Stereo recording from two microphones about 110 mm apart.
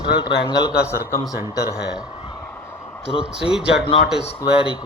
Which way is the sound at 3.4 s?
5° right (ahead or behind).